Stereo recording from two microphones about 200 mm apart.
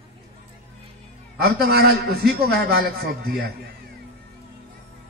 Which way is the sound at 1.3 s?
50° right (ahead or behind).